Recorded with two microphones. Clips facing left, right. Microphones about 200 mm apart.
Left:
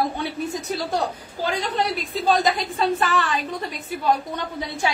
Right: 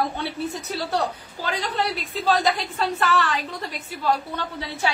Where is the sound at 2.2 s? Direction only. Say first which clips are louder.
Left 1 dB; 15° left (ahead or behind).